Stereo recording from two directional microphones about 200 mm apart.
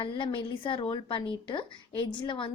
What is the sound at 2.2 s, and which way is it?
Speech, 25° left (ahead or behind).